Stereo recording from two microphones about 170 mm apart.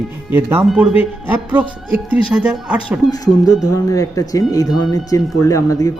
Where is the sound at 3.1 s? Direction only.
20° left (ahead or behind).